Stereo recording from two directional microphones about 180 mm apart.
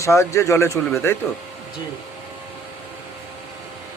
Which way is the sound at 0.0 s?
15° left (ahead or behind).